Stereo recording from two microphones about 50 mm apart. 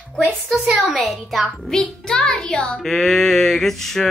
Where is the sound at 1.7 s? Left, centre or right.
Centre.